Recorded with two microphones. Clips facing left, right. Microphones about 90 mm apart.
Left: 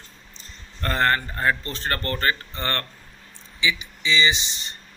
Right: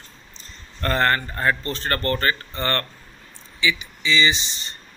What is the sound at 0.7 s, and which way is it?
Speech, 10° left (ahead or behind).